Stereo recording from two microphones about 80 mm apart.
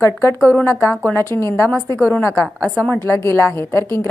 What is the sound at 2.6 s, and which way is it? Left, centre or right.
Speech, centre.